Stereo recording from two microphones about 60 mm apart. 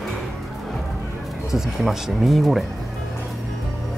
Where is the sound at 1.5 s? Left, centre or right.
Centre.